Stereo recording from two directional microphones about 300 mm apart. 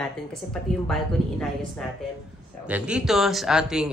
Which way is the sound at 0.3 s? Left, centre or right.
Centre.